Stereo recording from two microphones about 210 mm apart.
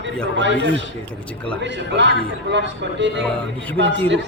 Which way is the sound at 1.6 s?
55° right (ahead or behind).